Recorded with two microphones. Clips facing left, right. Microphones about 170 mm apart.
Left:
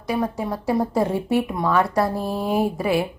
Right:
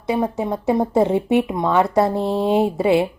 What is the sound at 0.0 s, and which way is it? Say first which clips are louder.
A woman's voice: right 3 dB; 25° right (ahead or behind).